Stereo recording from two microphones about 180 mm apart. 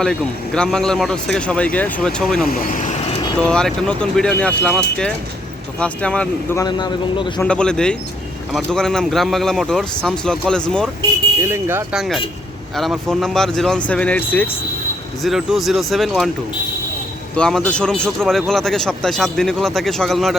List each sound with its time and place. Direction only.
0.0 s a man's voice: 5° left (ahead or behind)
2.5 s speech: 50° left (ahead or behind)
3.3 s a man's voice: 5° left (ahead or behind)
6.6 s a man's voice: 25° left (ahead or behind)
7.3 s a man's voice: 5° left (ahead or behind)
11.3 s a man's voice: 15° right (ahead or behind); by 14.5 s 10° left (ahead or behind)
15.2 s a man's voice: centre (ahead or behind)
17.3 s a man's voice: 5° left (ahead or behind)